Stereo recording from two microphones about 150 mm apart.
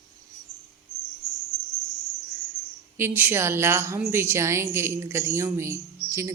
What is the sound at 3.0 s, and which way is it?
A woman's voice, 15° right (ahead or behind).